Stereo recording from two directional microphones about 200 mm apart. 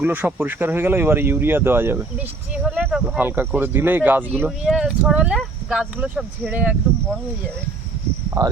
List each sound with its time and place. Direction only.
0.0 s speech: 10° right (ahead or behind)
8.4 s cricket: 20° right (ahead or behind)